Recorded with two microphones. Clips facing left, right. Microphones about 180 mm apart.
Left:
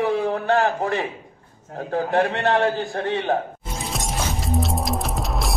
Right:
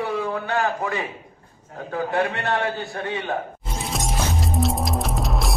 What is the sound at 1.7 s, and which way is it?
A man's voice, 35° left (ahead or behind).